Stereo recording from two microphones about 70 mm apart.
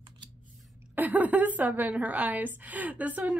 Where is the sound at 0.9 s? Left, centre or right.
Right.